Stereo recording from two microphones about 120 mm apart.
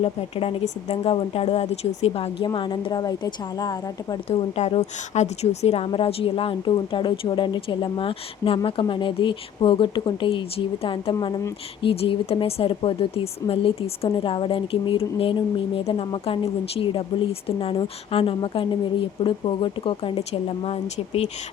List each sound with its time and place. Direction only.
0.0 s speech: 55° left (ahead or behind)
2.5 s a woman's voice: 40° left (ahead or behind)
4.3 s a woman's voice: 60° left (ahead or behind)